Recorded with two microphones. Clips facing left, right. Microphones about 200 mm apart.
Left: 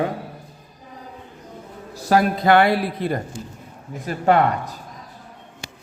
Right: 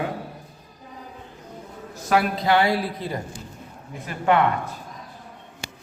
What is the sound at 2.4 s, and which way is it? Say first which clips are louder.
Speech: left 4 dB; 55° left (ahead or behind).